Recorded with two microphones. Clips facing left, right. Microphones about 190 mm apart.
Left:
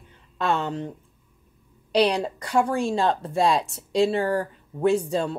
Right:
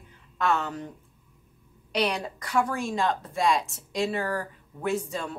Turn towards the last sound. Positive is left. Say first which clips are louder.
# left 7 dB
turn(degrees=35)  # may be behind; listen again after turning